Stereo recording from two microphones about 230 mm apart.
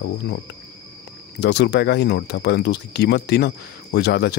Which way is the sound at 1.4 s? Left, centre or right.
Left.